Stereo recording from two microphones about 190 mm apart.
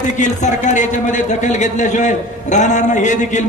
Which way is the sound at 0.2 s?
40° left (ahead or behind).